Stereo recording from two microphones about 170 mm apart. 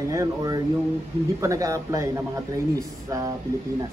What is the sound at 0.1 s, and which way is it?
Speech, 20° right (ahead or behind).